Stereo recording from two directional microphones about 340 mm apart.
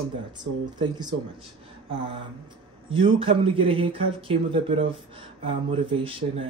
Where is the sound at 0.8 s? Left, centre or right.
Centre.